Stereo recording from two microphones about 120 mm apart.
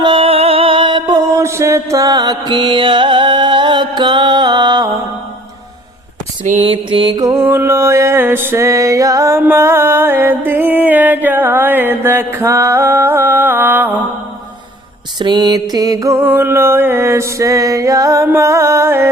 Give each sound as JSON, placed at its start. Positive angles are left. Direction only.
{"t": 0.0, "sound": "music", "side_deg": -45}
{"t": 6.6, "sound": "a sound", "side_deg": -45}
{"t": 7.2, "sound": "music", "side_deg": -30}
{"t": 15.2, "sound": "music", "side_deg": -35}